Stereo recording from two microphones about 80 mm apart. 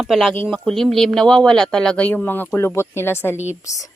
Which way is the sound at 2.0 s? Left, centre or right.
Left.